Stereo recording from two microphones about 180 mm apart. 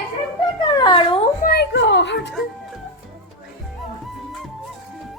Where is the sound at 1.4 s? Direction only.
65° left (ahead or behind).